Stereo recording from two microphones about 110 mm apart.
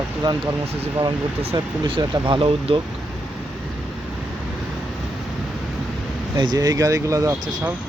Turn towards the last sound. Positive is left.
turn(degrees=-25)  # may be behind; listen again after turning